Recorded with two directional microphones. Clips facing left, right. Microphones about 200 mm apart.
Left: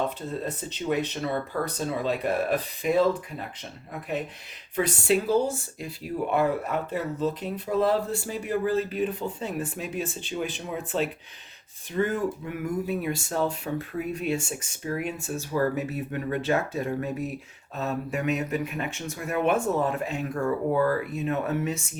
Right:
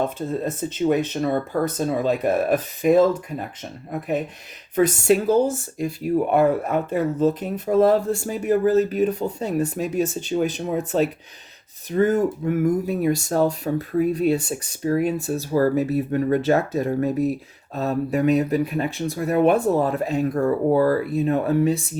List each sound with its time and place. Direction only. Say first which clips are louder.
0.0 s speech: right 5 dB; 45° right (ahead or behind)
4.7 s speech: right 6 dB; 45° right (ahead or behind)